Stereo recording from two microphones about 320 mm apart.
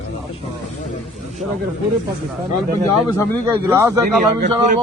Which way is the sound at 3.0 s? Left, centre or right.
Centre.